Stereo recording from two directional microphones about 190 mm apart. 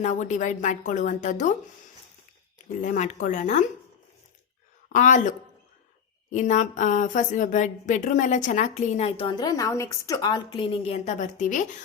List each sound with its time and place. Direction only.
0.0 s a woman's voice: 40° left (ahead or behind)
2.8 s a woman's voice: 40° left (ahead or behind)
4.9 s a woman's voice: 40° left (ahead or behind)
6.3 s a woman's voice: 40° left (ahead or behind)